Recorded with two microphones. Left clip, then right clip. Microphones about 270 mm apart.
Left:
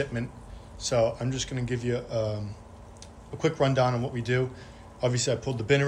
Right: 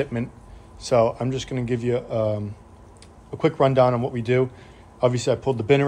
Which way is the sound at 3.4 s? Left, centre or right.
Right.